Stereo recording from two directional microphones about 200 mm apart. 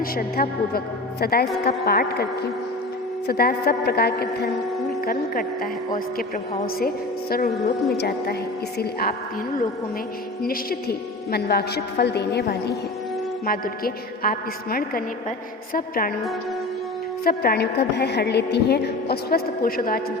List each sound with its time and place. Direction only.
0.0 s a woman's voice: 50° left (ahead or behind)
10.4 s a woman's voice: 50° left (ahead or behind)
17.2 s a woman's voice: 50° left (ahead or behind)